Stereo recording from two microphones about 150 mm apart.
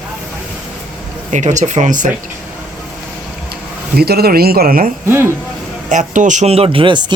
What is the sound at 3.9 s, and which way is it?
Speech, 90° right.